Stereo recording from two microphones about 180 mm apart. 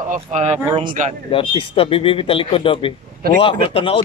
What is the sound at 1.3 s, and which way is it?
A man's voice, 30° left (ahead or behind).